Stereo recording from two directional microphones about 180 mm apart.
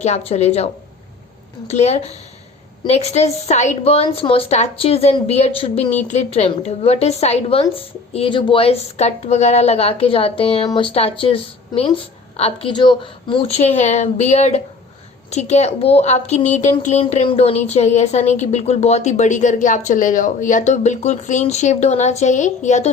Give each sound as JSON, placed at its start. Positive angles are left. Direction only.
{"t": 0.0, "sound": "speech", "side_deg": 35}